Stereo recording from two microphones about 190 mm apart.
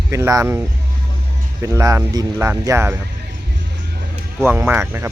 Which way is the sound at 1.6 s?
15° right (ahead or behind).